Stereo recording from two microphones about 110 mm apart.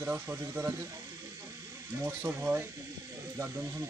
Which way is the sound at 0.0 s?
15° right (ahead or behind).